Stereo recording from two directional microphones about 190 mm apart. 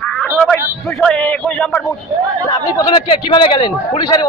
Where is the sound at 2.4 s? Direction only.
25° left (ahead or behind).